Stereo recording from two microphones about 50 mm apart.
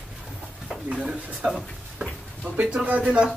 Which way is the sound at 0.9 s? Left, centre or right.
Centre.